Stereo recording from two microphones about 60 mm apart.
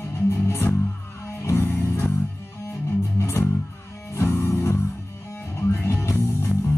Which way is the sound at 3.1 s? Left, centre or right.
Left.